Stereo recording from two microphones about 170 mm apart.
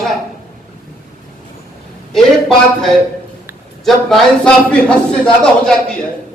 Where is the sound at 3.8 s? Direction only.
Centre (ahead or behind).